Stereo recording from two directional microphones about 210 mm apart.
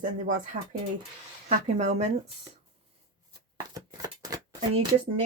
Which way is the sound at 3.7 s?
20° right (ahead or behind).